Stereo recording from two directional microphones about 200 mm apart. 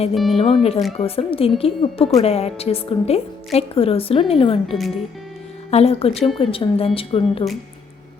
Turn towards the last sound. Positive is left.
turn(degrees=30)  # may be behind; listen again after turning